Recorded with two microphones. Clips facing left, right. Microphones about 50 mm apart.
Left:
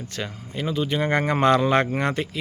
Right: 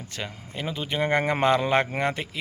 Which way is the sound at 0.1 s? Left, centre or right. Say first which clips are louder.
Even; centre.